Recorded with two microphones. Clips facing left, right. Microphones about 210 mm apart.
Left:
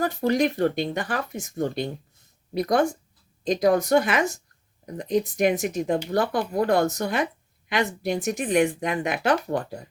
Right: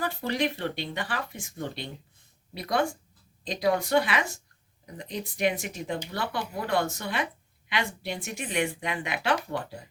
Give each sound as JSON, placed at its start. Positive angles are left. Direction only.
{"t": 0.0, "sound": "speech", "side_deg": 45}